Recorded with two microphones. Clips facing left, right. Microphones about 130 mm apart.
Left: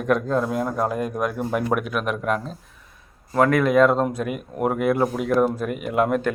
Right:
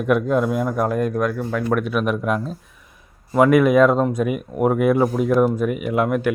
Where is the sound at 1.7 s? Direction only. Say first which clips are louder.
Right 3 dB; centre (ahead or behind).